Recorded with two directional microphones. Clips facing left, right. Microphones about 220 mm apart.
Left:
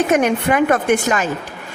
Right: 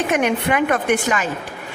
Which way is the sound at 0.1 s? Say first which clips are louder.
Left 3 dB; 45° left (ahead or behind).